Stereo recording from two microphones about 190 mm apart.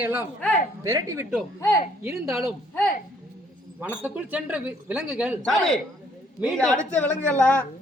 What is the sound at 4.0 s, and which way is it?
A man's voice, 10° right (ahead or behind).